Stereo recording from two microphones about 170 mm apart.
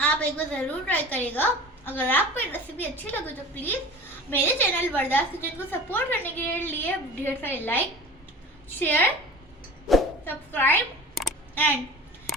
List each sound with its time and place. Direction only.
0.0 s a woman's voice: 10° left (ahead or behind)
9.9 s speech: centre (ahead or behind)
10.2 s a woman's voice: 10° left (ahead or behind)